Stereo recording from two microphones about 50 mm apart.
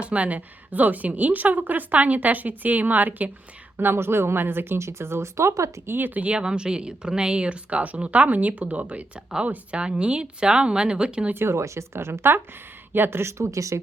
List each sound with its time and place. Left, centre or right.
0.0 s a woman's voice: right
3.8 s speech: right
5.8 s a woman's voice: right
6.2 s speech: centre
11.3 s a woman's voice: right